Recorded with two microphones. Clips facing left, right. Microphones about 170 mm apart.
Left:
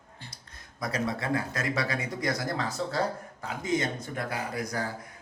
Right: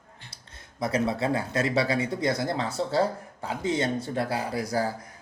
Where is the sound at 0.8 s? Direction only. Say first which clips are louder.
Right 5 dB; 25° right (ahead or behind).